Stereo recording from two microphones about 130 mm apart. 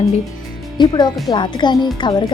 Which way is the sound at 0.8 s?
35° left (ahead or behind).